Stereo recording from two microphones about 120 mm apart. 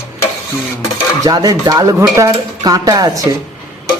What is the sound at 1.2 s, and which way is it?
Speech, 35° right (ahead or behind).